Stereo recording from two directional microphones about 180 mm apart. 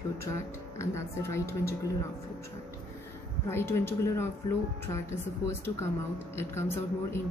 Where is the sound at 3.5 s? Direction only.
15° left (ahead or behind).